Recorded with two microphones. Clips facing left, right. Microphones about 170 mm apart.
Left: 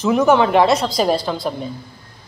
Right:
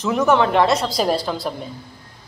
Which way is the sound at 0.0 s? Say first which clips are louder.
Left 3 dB; centre (ahead or behind).